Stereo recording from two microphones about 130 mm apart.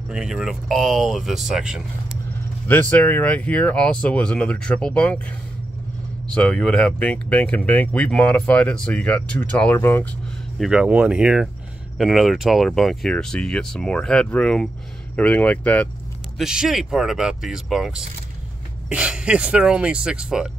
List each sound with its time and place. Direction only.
0.1 s speech: 5° right (ahead or behind)
2.7 s speech: 15° left (ahead or behind)
6.3 s speech: 5° left (ahead or behind)
10.6 s speech: 5° right (ahead or behind); by 15.9 s 10° left (ahead or behind)
16.3 s speech: 5° right (ahead or behind)